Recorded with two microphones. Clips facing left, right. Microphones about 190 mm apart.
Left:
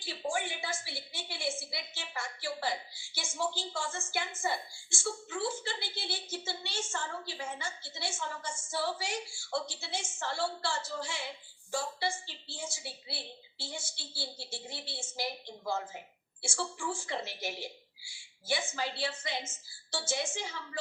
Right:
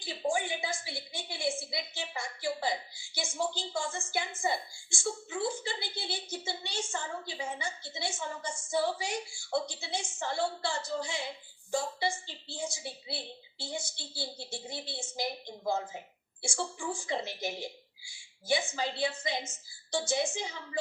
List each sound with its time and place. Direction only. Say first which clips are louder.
0.0 s a woman's voice: right 3 dB; 15° right (ahead or behind)